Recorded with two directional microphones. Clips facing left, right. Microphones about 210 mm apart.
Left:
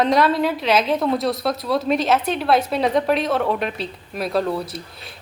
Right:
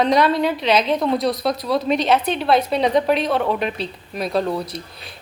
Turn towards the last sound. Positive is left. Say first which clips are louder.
# right 1 dB
turn(degrees=0)  # may be behind; listen again after turning